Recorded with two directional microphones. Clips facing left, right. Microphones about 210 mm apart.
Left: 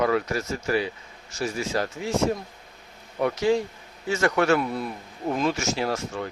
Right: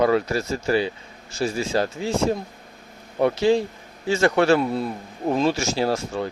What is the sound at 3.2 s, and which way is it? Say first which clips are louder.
Speech: right 4 dB; 30° right (ahead or behind).